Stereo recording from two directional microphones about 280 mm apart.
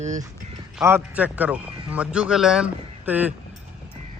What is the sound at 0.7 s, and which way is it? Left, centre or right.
A man's voice, centre.